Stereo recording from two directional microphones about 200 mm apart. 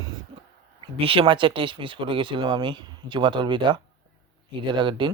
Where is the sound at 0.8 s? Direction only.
25° right (ahead or behind).